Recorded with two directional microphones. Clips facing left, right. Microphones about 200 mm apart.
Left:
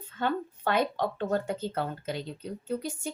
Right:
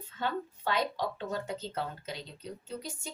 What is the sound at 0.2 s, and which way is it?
Speech, 55° left (ahead or behind).